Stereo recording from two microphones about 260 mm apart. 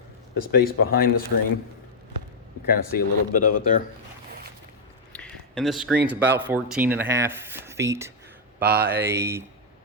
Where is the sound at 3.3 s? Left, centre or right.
Left.